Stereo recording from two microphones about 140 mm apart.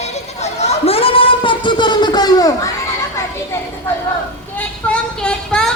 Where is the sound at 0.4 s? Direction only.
50° left (ahead or behind); by 2.5 s 30° left (ahead or behind).